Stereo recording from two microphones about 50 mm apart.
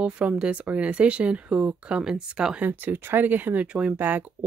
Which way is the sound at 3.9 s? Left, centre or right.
Right.